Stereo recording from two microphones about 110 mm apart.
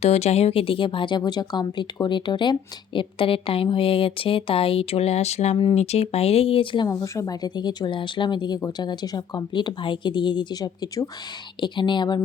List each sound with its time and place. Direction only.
0.0 s speech: 70° left (ahead or behind); by 6.8 s 55° left (ahead or behind)
6.8 s speech: 30° left (ahead or behind)
11.6 s speech: 45° left (ahead or behind)